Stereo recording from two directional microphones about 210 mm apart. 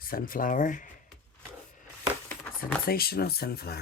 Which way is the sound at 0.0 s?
45° left (ahead or behind).